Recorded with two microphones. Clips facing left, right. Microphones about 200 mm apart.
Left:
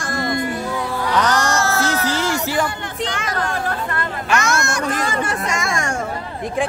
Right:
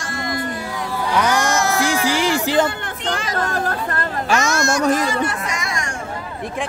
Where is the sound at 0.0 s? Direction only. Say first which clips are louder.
Left 4 dB; 40° left (ahead or behind).